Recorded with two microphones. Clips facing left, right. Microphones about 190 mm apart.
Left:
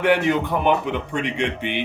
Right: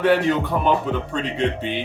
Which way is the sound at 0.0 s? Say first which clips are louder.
Right 1 dB; 15° left (ahead or behind).